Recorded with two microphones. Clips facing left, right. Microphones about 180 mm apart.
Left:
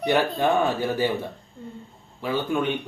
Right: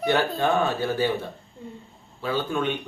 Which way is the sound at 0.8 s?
15° left (ahead or behind).